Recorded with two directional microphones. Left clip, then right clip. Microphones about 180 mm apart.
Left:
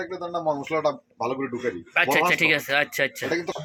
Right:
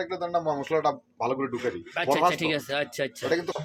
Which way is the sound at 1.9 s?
Centre (ahead or behind).